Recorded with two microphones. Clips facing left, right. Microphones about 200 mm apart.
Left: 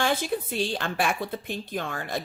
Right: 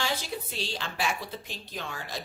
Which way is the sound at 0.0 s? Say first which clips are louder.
Left 7 dB; 55° left (ahead or behind).